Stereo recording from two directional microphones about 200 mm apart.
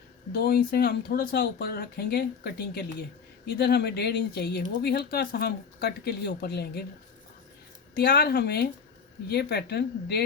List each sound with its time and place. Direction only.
0.3 s speech: 50° left (ahead or behind)
7.9 s speech: 50° left (ahead or behind)